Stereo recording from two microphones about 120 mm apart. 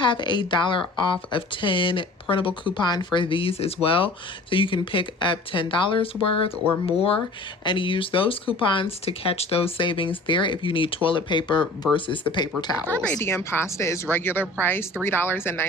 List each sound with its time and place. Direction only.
0.0 s a woman's voice: 40° left (ahead or behind)
7.6 s speech: 40° left (ahead or behind)
12.9 s speech: 15° left (ahead or behind)